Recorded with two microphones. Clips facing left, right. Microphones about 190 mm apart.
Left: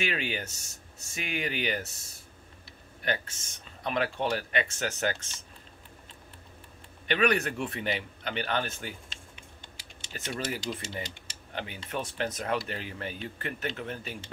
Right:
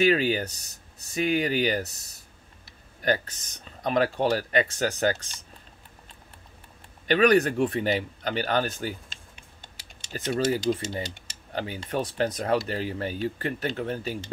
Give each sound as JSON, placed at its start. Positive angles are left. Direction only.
{"t": 0.0, "sound": "speech", "side_deg": -35}
{"t": 7.1, "sound": "speech", "side_deg": -40}